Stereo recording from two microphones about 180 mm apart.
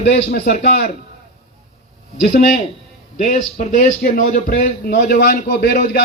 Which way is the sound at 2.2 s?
55° left (ahead or behind).